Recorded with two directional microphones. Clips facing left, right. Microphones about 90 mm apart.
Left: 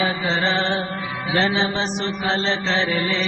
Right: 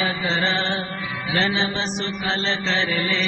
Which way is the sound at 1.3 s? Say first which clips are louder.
Left 2 dB; 25° left (ahead or behind).